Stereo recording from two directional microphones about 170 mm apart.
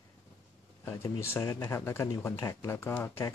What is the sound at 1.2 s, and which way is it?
Speech, 15° left (ahead or behind).